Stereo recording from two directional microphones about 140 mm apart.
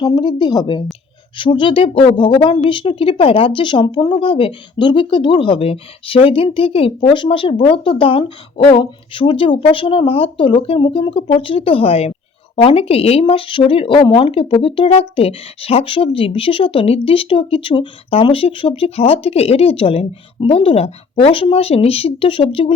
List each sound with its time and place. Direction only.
0.0 s speech: 35° left (ahead or behind)